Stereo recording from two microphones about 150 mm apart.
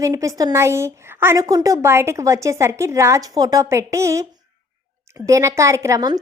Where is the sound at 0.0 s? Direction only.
20° right (ahead or behind).